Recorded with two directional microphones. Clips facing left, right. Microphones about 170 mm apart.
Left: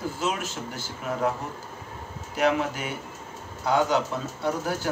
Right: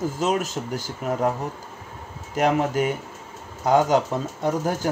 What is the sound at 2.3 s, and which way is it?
Speech, 40° right (ahead or behind).